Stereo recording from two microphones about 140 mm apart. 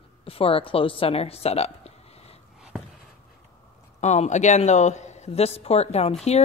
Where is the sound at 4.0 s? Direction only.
55° left (ahead or behind).